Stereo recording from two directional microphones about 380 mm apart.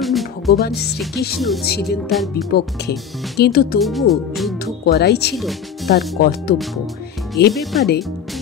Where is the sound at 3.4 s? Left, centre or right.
Left.